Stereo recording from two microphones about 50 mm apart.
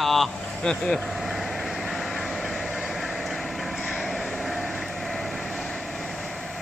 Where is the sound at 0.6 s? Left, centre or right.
Centre.